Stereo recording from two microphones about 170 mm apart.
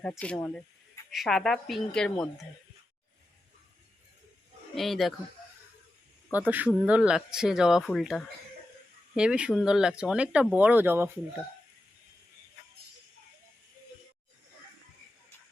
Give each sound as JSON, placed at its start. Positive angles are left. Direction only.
{"t": 0.1, "sound": "speech", "side_deg": 10}
{"t": 4.7, "sound": "speech", "side_deg": 0}
{"t": 6.5, "sound": "speech", "side_deg": -10}